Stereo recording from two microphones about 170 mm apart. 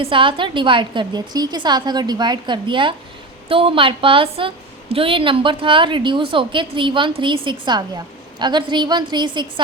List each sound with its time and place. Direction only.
0.0 s a woman's voice: 30° right (ahead or behind)